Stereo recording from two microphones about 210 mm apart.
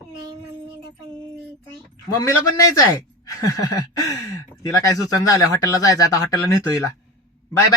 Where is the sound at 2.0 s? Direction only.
15° left (ahead or behind).